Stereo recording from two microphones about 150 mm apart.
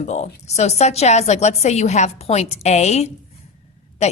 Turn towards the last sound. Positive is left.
turn(degrees=45)  # may be behind; listen again after turning